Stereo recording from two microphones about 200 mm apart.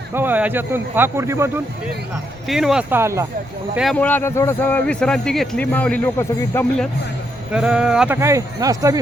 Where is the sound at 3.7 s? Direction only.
5° left (ahead or behind).